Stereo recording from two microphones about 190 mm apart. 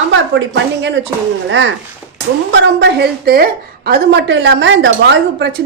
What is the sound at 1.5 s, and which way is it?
A woman's voice, 80° right.